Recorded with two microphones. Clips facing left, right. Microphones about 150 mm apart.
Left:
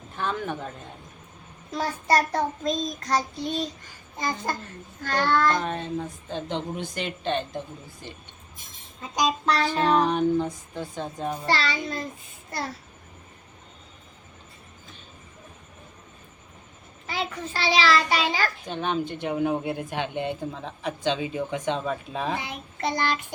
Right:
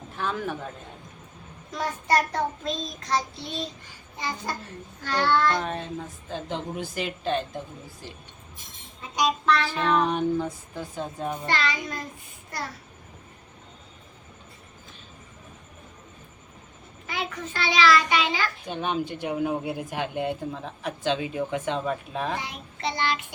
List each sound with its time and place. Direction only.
0.2 s a man's voice: centre (ahead or behind)
1.7 s child singing: 35° left (ahead or behind)
4.2 s speech: 45° left (ahead or behind)
5.5 s speech: centre (ahead or behind)
9.1 s child singing: 35° left (ahead or behind)
10.1 s speech: centre (ahead or behind)
11.4 s child singing: 35° left (ahead or behind)
17.1 s child singing: 30° left (ahead or behind)
18.6 s speech: 5° right (ahead or behind)
22.8 s speech: 45° left (ahead or behind)